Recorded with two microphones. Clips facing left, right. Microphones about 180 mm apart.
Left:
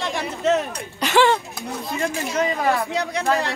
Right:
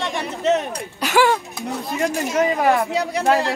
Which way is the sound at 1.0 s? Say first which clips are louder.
Even; 5° right (ahead or behind).